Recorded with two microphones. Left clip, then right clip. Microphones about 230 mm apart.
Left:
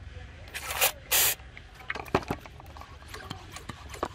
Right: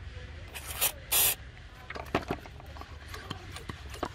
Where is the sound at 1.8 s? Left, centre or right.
Left.